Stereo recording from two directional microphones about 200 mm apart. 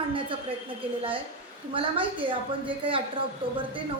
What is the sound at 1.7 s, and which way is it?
A woman's voice, 25° right (ahead or behind).